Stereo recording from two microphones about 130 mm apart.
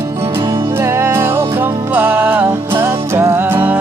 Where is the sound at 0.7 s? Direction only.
20° right (ahead or behind).